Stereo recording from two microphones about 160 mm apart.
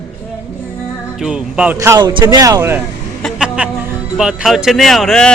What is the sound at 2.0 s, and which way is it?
Speech, 25° right (ahead or behind).